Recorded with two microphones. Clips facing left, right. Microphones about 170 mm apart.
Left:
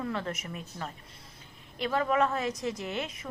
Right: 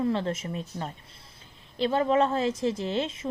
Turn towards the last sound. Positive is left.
turn(degrees=-30)  # may be behind; listen again after turning